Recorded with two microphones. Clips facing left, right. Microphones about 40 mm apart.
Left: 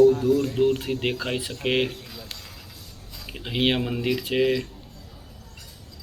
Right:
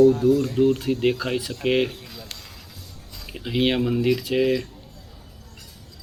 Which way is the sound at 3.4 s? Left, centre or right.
Centre.